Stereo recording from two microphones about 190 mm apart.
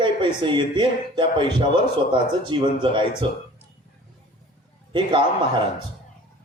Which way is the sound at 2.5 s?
25° right (ahead or behind).